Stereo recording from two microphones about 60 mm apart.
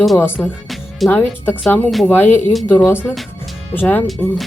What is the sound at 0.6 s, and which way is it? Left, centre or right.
Music, centre.